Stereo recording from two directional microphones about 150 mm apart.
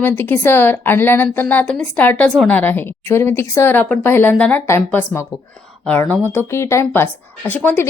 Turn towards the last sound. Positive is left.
turn(degrees=10)  # may be behind; listen again after turning